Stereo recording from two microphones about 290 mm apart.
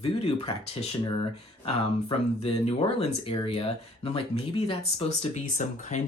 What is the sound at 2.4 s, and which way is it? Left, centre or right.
Speech, centre.